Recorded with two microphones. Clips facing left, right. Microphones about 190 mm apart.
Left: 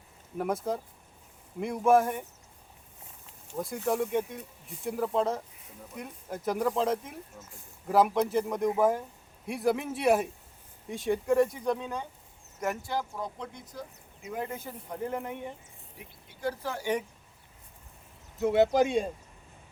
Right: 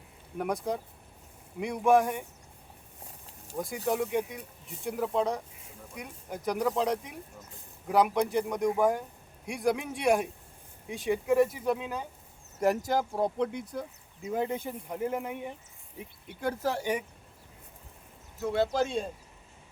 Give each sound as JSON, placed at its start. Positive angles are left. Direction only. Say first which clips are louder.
{"t": 0.3, "sound": "speech", "louder": "left 1 dB", "side_deg": 0}
{"t": 3.8, "sound": "speech", "louder": "left 1 dB", "side_deg": 0}
{"t": 12.5, "sound": "speech", "louder": "right 5 dB", "side_deg": -40}
{"t": 13.4, "sound": "speech", "louder": "right 9 dB", "side_deg": -65}
{"t": 14.2, "sound": "speech", "louder": "right 5 dB", "side_deg": -30}
{"t": 16.3, "sound": "speech", "louder": "right 1 dB", "side_deg": -55}
{"t": 16.9, "sound": "speech", "louder": "left 2 dB", "side_deg": -10}
{"t": 18.4, "sound": "speech", "louder": "left 4 dB", "side_deg": 20}